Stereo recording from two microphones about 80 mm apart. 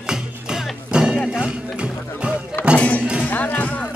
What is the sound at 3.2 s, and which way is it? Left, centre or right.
Cowbell, left.